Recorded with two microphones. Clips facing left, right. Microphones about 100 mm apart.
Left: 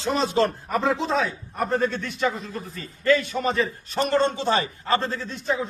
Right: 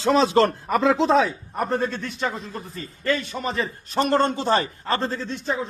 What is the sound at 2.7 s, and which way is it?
Speech, 30° right (ahead or behind).